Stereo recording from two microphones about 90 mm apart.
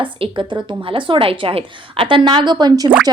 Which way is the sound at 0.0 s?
70° right (ahead or behind).